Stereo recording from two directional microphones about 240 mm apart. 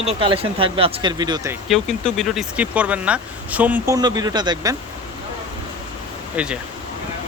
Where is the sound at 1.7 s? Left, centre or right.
Centre.